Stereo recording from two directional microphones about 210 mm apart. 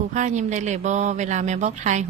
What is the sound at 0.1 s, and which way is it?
Speech, 35° right (ahead or behind).